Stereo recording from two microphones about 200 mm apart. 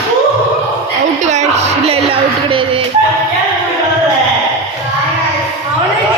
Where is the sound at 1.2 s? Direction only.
35° right (ahead or behind).